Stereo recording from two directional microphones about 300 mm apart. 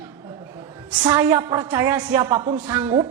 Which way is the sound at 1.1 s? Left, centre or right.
Centre.